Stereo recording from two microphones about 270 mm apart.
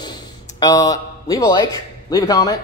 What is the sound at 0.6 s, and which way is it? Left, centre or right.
Speech, centre.